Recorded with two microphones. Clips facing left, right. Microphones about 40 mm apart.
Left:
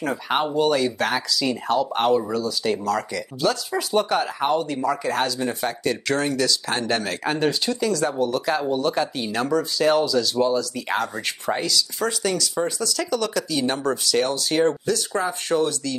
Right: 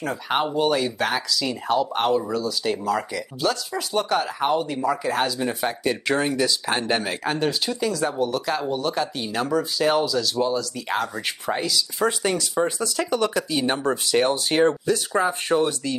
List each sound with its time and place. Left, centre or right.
0.0 s speech: centre
7.2 s speech: centre
12.1 s speech: right